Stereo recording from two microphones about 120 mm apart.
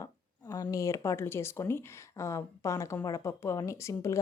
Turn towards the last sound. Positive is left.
turn(degrees=25)  # may be behind; listen again after turning